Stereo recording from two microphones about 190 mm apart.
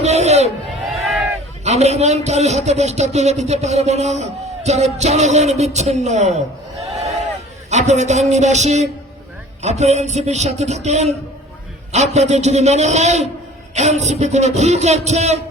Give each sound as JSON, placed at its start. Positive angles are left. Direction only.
{"t": 0.0, "sound": "a sound", "side_deg": -35}
{"t": 1.6, "sound": "a man's voice", "side_deg": -35}
{"t": 7.7, "sound": "a man's voice", "side_deg": -35}